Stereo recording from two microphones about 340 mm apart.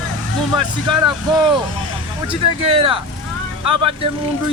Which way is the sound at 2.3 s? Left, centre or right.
Centre.